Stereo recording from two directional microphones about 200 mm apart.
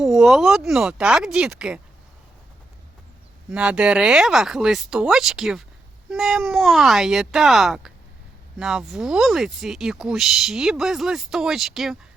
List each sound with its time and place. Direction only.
0.0 s speech: centre (ahead or behind)
3.5 s speech: 5° right (ahead or behind)